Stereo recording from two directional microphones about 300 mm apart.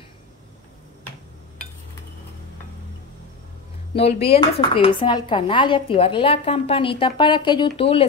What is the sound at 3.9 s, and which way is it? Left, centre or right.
Speech, centre.